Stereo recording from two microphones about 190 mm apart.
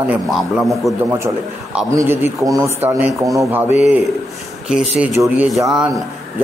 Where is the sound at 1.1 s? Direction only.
15° right (ahead or behind).